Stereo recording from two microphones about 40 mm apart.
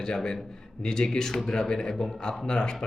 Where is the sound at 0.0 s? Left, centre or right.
Centre.